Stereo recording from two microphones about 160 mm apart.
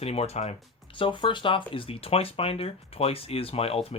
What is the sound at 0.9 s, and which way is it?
Speech, 30° left (ahead or behind).